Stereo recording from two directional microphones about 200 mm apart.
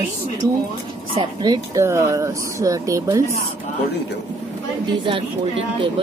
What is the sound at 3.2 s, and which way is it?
Speech, 35° left (ahead or behind).